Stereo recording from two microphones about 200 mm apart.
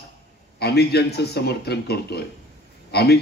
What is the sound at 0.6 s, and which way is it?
A man's voice, 55° left (ahead or behind).